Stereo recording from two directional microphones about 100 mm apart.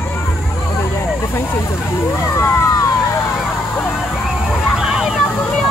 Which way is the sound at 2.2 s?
30° left (ahead or behind).